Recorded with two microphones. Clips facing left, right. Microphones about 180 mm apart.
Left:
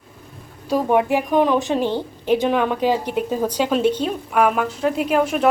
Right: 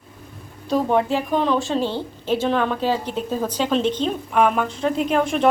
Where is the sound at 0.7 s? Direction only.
15° left (ahead or behind).